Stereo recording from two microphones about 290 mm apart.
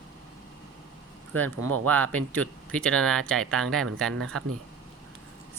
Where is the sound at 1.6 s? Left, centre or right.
Right.